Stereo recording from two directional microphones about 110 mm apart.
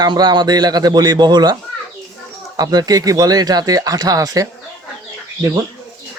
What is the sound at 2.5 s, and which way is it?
Speech, 35° right (ahead or behind).